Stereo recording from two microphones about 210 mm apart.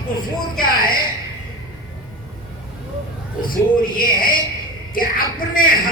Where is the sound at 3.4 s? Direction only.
45° left (ahead or behind).